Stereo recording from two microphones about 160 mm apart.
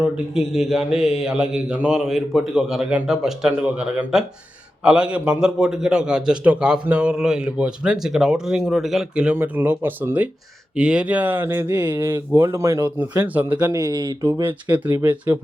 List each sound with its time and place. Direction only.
0.0 s a man's voice: centre (ahead or behind)
13.6 s speech: 20° right (ahead or behind)